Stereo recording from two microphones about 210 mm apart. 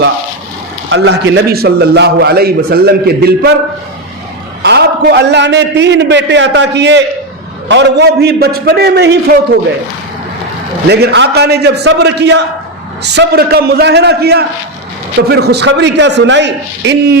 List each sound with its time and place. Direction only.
0.9 s a man's voice: 60° right (ahead or behind)
4.6 s a man's voice: 50° right (ahead or behind)
10.8 s a man's voice: 50° right (ahead or behind)